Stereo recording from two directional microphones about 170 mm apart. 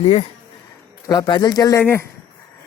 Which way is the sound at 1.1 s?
25° left (ahead or behind).